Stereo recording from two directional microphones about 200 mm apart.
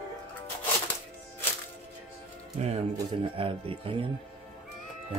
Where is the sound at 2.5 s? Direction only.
35° right (ahead or behind).